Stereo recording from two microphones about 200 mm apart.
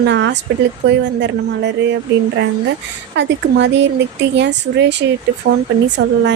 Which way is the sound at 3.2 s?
60° right (ahead or behind).